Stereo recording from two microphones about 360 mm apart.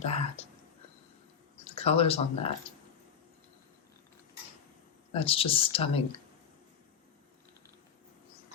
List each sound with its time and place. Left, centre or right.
0.0 s speech: centre
1.6 s speech: centre
5.1 s speech: centre